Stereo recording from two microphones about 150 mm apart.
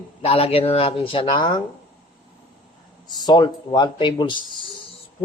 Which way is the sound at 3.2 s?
30° left (ahead or behind).